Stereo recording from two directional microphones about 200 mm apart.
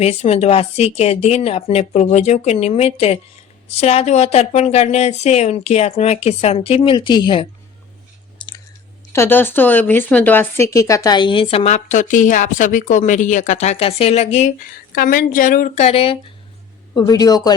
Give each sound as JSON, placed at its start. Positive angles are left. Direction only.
{"t": 0.0, "sound": "speech", "side_deg": 30}
{"t": 9.1, "sound": "speech", "side_deg": 10}
{"t": 16.9, "sound": "speech", "side_deg": 20}